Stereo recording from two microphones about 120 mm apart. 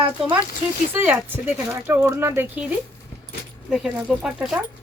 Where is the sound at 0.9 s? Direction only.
15° right (ahead or behind).